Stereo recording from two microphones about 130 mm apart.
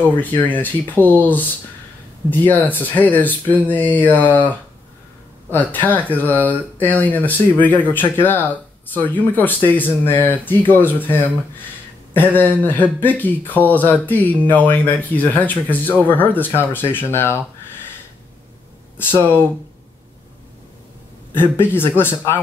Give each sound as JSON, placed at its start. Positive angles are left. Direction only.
{"t": 0.0, "sound": "speech", "side_deg": 15}
{"t": 18.9, "sound": "speech", "side_deg": 15}
{"t": 21.3, "sound": "speech", "side_deg": 15}